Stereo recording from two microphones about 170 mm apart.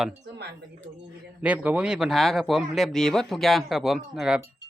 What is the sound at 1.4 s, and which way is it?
Speech, 10° right (ahead or behind).